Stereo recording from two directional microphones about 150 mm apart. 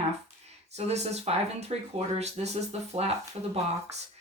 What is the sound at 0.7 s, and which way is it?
Speech, 45° right (ahead or behind).